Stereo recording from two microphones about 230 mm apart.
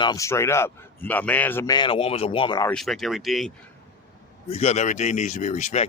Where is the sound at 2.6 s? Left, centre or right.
Centre.